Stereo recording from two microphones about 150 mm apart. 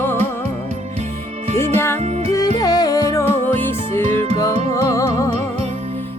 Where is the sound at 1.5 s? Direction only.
15° left (ahead or behind).